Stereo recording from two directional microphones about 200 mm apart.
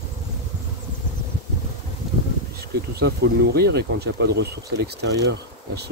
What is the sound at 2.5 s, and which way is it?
Speech, 55° right (ahead or behind).